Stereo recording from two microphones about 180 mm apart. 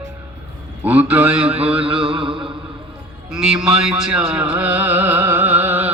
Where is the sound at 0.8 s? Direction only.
5° right (ahead or behind).